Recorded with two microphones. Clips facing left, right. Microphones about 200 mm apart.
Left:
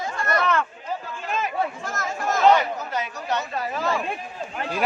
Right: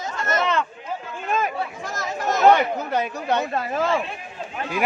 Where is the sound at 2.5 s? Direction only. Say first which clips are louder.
Right 2 dB; 60° right (ahead or behind).